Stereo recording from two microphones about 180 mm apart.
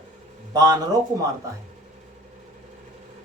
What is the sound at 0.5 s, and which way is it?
Speech, 20° right (ahead or behind).